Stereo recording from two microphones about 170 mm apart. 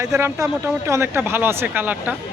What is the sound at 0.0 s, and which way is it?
Speech, 15° right (ahead or behind).